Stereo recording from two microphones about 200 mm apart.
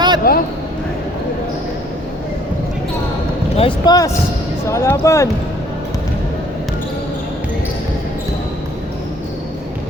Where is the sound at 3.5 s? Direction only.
25° left (ahead or behind).